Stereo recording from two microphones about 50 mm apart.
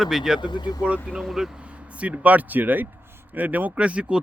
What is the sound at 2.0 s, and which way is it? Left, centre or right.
Speech, right.